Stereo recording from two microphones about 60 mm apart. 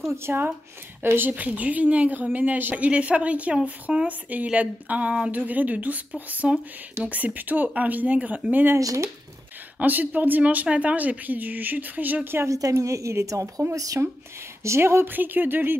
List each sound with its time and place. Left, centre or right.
0.1 s speech: right
1.1 s a woman's voice: right
8.7 s a woman's voice: right
9.8 s a woman's voice: right
12.4 s a woman's voice: right
13.7 s speech: right
14.6 s speech: right